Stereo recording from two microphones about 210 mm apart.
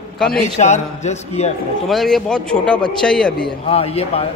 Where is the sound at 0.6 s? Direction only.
35° left (ahead or behind).